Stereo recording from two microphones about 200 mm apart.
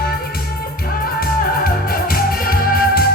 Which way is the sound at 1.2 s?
45° left (ahead or behind).